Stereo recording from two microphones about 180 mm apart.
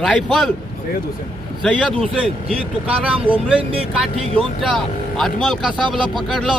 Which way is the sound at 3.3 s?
10° right (ahead or behind).